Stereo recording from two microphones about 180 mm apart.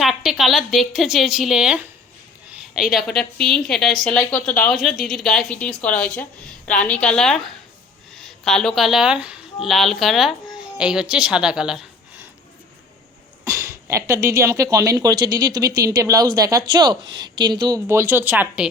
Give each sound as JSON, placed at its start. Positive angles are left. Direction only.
{"t": 0.0, "sound": "speech", "side_deg": 0}
{"t": 2.9, "sound": "a woman's voice", "side_deg": 0}
{"t": 13.4, "sound": "speech", "side_deg": -15}